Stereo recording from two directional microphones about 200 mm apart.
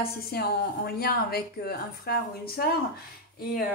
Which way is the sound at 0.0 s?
50° left (ahead or behind).